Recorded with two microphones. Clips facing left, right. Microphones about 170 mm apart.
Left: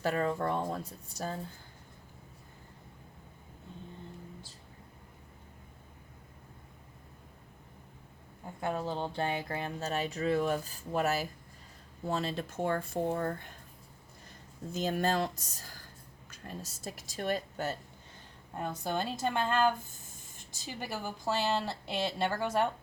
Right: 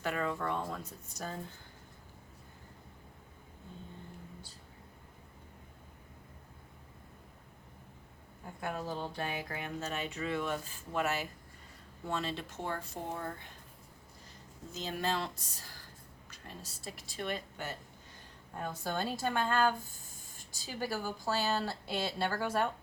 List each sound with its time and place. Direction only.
0.0 s speech: 35° left (ahead or behind)
8.6 s speech: 25° left (ahead or behind); by 13.5 s 50° left (ahead or behind)
14.7 s speech: 50° left (ahead or behind)
18.5 s speech: 20° left (ahead or behind)